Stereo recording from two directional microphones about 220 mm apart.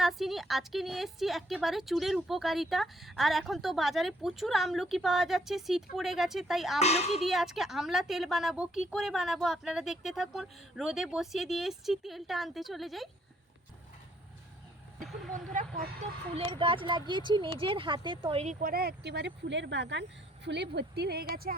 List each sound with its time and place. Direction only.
0.0 s a woman's voice: centre (ahead or behind)
6.7 s a child's voice: 30° left (ahead or behind)
7.2 s a woman's voice: centre (ahead or behind)
15.5 s speech: 40° right (ahead or behind)
16.3 s speech: 25° right (ahead or behind); by 21.5 s 45° right (ahead or behind)